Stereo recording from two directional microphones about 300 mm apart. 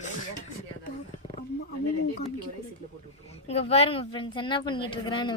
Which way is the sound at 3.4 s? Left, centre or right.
Centre.